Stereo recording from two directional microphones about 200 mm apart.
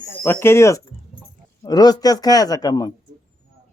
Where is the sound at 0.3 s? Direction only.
10° left (ahead or behind).